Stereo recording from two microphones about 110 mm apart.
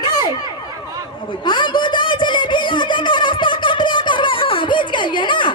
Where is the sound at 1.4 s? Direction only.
45° left (ahead or behind).